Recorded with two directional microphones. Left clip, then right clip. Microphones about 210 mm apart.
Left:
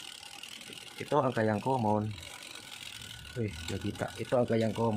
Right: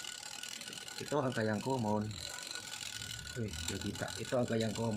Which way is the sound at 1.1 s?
60° left (ahead or behind).